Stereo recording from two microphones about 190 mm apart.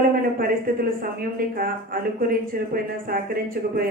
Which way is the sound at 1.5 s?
50° right (ahead or behind).